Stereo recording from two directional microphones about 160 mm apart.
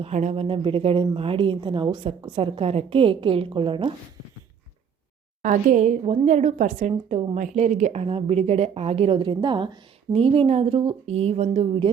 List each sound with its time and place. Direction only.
0.0 s a woman's voice: 45° right (ahead or behind)
5.4 s a woman's voice: 50° right (ahead or behind); by 11.9 s 35° right (ahead or behind)